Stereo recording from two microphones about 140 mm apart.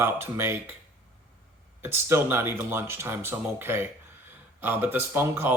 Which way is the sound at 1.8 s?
15° right (ahead or behind).